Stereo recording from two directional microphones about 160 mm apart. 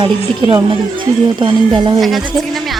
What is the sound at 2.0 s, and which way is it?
Speech, centre (ahead or behind).